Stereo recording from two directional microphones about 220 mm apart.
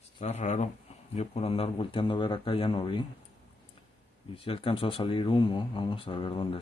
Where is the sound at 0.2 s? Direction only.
30° left (ahead or behind).